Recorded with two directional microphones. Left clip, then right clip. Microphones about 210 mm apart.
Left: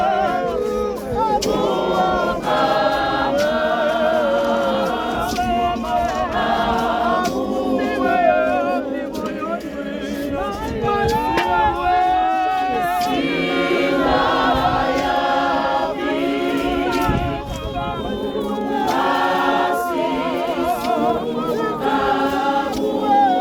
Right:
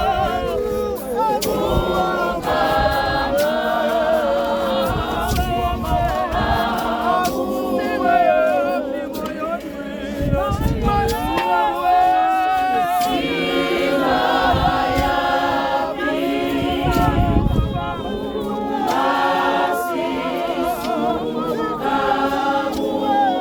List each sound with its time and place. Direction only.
7.7 s music: 55° right (ahead or behind)
10.8 s music: 55° right (ahead or behind)
13.6 s choir: 55° right (ahead or behind)